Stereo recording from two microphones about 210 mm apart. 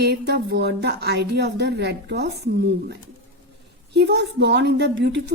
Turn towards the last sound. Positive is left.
turn(degrees=-55)  # may be behind; listen again after turning